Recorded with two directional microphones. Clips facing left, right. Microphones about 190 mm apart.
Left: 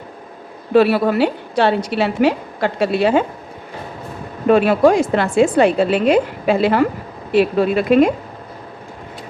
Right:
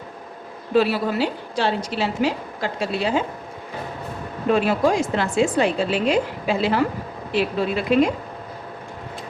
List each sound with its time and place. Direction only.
0.7 s a woman's voice: 60° left (ahead or behind)
4.4 s a woman's voice: 60° left (ahead or behind)